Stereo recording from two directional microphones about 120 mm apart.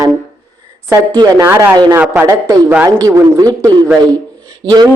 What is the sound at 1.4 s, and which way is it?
Speech, 20° right (ahead or behind).